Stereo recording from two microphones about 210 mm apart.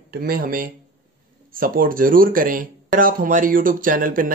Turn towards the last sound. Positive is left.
turn(degrees=-40)  # may be behind; listen again after turning